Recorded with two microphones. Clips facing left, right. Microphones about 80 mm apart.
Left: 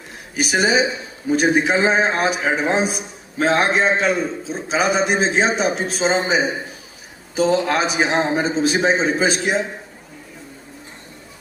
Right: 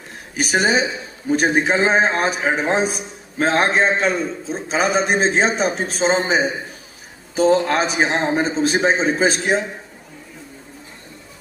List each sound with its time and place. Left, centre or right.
0.3 s a man's voice: right